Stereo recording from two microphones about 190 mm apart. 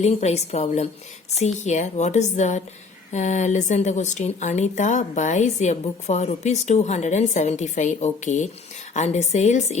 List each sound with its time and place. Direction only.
0.0 s speech: 35° left (ahead or behind)